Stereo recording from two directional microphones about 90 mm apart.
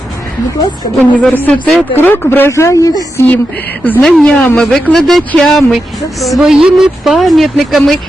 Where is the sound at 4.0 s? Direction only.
5° left (ahead or behind).